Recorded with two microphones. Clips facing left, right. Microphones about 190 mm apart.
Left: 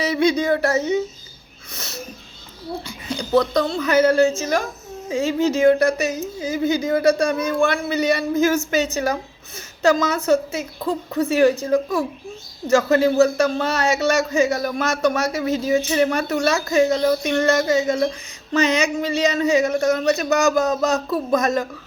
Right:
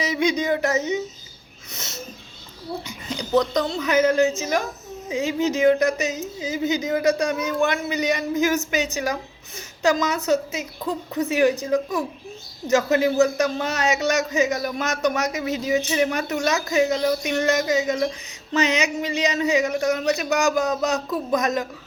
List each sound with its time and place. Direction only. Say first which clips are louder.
0.0 s a man's voice: left 4 dB; 15° right (ahead or behind)
1.7 s a sound: left 2 dB; 20° right (ahead or behind)
2.8 s a man's voice: left 3 dB; 15° right (ahead or behind)